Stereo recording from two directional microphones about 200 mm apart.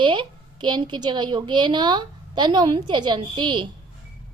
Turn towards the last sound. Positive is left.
turn(degrees=-25)  # may be behind; listen again after turning